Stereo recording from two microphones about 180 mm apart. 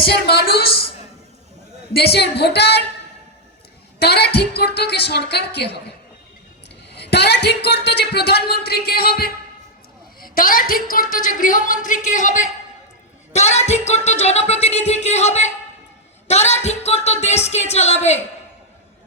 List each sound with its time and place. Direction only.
0.0 s speech: 65° left (ahead or behind)
2.1 s a sound: 70° left (ahead or behind)
4.0 s speech: 65° left (ahead or behind)
6.9 s a woman's voice: 65° left (ahead or behind); by 18.2 s 40° left (ahead or behind)